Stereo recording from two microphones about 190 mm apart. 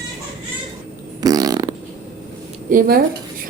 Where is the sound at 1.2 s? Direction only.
20° right (ahead or behind).